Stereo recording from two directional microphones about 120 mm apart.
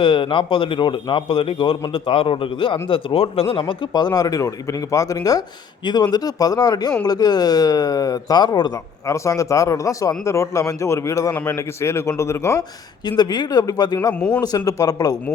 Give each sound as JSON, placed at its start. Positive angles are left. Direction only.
{"t": 0.0, "sound": "a man's voice", "side_deg": 45}
{"t": 13.1, "sound": "speech", "side_deg": 35}
{"t": 14.2, "sound": "speech", "side_deg": 10}
{"t": 14.4, "sound": "speech", "side_deg": 30}